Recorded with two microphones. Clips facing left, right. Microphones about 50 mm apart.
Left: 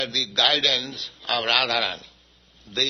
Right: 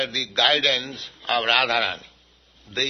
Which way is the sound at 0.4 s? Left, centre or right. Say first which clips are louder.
Right 2 dB; right.